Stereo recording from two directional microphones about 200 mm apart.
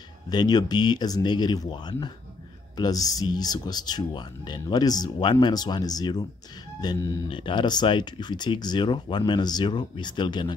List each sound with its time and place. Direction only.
0.3 s speech: 20° left (ahead or behind)